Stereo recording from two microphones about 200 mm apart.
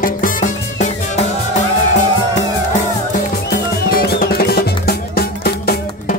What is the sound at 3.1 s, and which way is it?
Music, 45° left (ahead or behind).